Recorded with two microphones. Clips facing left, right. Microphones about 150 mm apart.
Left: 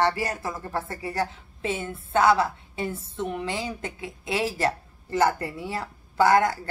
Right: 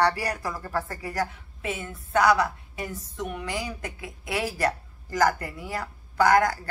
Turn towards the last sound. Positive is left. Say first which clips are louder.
# left 1 dB
turn(degrees=25)  # may be behind; listen again after turning